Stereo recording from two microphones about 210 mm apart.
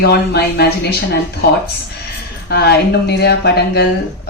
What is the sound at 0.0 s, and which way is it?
Speech, 50° left (ahead or behind).